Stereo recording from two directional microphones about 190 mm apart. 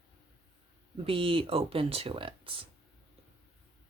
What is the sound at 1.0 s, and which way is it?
Speech, 30° right (ahead or behind).